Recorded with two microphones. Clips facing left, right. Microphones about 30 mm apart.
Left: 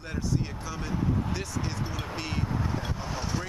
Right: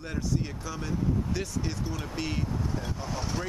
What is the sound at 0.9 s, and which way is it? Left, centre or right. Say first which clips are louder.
Vehicle: left 1 dB; left.